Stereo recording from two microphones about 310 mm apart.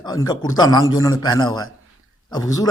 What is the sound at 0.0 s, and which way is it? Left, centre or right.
A man's voice, centre.